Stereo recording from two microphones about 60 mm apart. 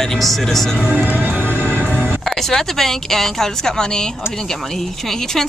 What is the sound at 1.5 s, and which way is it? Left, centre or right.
Music, left.